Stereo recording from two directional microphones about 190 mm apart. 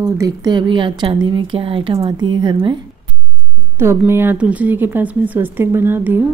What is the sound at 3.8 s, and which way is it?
Speech, 15° right (ahead or behind).